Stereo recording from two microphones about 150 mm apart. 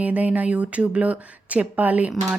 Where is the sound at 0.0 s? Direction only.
10° right (ahead or behind).